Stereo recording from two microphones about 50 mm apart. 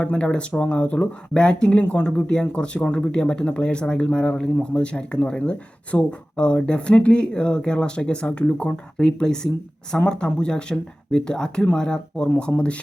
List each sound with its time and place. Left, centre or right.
0.0 s speech: left